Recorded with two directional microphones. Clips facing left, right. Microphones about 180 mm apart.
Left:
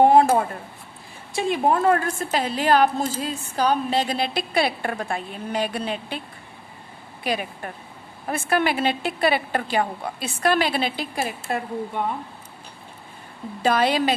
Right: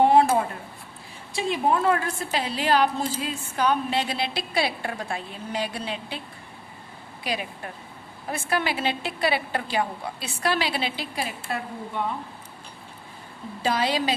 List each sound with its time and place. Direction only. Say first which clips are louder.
0.0 s a sound: left 3 dB; 45° left (ahead or behind)
1.4 s a woman's voice: left 3 dB; 50° left (ahead or behind)
8.3 s a woman's voice: left 4 dB; 55° left (ahead or behind)
13.6 s a woman's voice: left 4 dB; 55° left (ahead or behind)